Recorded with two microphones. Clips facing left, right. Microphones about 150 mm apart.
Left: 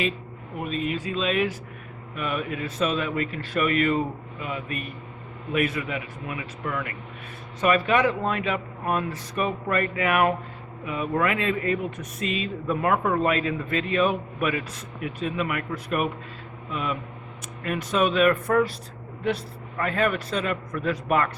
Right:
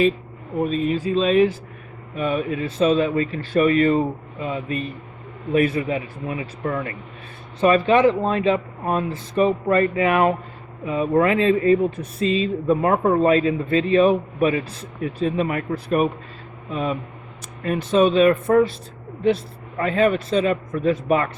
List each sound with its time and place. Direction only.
0.6 s a man's voice: 35° right (ahead or behind)
19.8 s speech: 25° right (ahead or behind)